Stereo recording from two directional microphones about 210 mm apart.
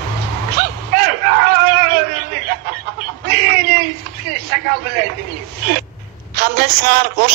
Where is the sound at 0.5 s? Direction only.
50° right (ahead or behind).